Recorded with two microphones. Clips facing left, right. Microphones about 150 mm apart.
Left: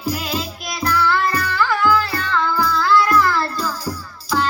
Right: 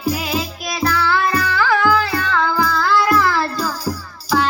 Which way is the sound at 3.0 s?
10° right (ahead or behind).